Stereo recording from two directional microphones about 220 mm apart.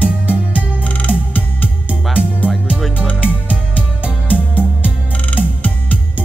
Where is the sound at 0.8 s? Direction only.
5° left (ahead or behind).